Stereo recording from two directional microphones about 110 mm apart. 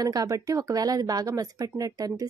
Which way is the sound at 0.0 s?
35° right (ahead or behind).